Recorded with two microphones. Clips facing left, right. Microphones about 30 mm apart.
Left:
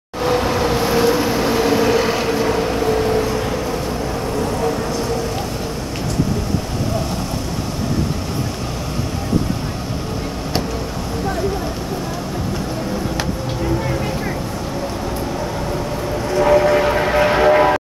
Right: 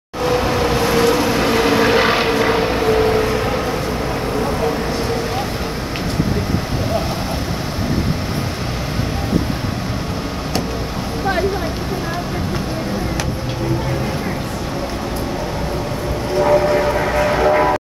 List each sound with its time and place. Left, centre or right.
0.2 s train: centre; by 3.3 s right
3.3 s vehicle: right
16.4 s vehicle: centre
17.2 s train: centre